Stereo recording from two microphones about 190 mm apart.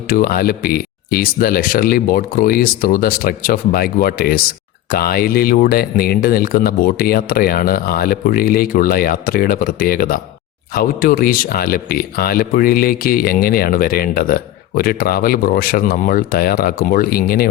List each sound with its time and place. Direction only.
0.1 s a man's voice: 50° left (ahead or behind)